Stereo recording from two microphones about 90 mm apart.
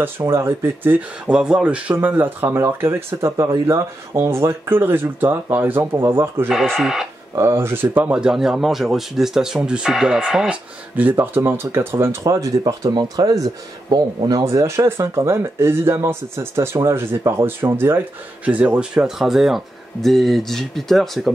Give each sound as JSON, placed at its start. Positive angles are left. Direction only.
{"t": 0.3, "sound": "speech", "side_deg": -30}
{"t": 6.5, "sound": "speech", "side_deg": 0}
{"t": 7.3, "sound": "speech", "side_deg": -30}
{"t": 11.0, "sound": "speech", "side_deg": -20}
{"t": 12.3, "sound": "speech", "side_deg": -40}
{"t": 14.4, "sound": "speech", "side_deg": -35}
{"t": 18.5, "sound": "speech", "side_deg": -15}